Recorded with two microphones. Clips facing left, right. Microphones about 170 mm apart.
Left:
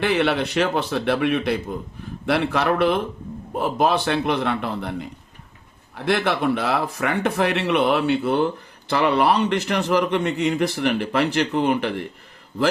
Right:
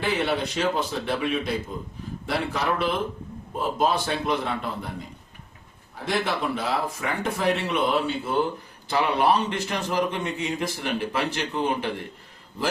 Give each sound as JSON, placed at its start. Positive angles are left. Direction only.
{"t": 0.0, "sound": "a man's voice", "side_deg": 70}
{"t": 6.1, "sound": "a man's voice", "side_deg": 70}